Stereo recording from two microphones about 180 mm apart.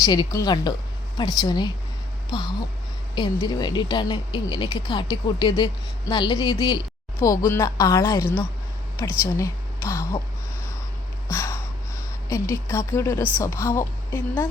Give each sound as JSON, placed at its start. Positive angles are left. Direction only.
{"t": 0.0, "sound": "speech", "side_deg": 20}
{"t": 7.2, "sound": "a woman's voice", "side_deg": 15}
{"t": 11.3, "sound": "a sound", "side_deg": 15}
{"t": 12.3, "sound": "a woman's voice", "side_deg": 15}